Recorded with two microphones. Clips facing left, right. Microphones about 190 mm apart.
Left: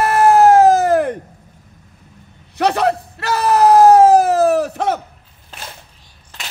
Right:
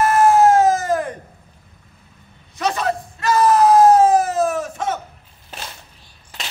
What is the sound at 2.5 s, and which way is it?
Screaming, 65° left (ahead or behind).